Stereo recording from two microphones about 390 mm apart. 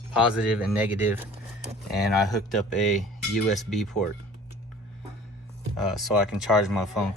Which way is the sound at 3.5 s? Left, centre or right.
Centre.